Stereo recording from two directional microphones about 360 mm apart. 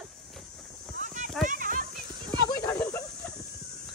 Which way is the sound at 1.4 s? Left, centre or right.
Right.